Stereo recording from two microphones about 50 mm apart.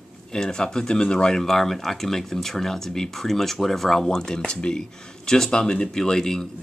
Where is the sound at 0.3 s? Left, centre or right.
Centre.